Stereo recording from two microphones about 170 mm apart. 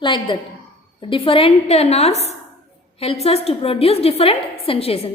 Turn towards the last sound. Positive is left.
turn(degrees=35)  # may be behind; listen again after turning